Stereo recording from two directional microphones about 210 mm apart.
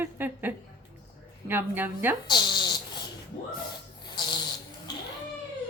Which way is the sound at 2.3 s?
20° left (ahead or behind).